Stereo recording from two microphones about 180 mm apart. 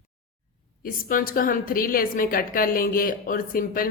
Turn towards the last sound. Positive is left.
turn(degrees=50)  # may be behind; listen again after turning